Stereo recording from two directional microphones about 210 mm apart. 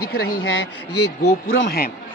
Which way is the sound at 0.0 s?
50° left (ahead or behind).